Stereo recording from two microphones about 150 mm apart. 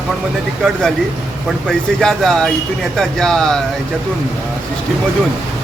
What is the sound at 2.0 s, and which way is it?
Speech, 5° left (ahead or behind).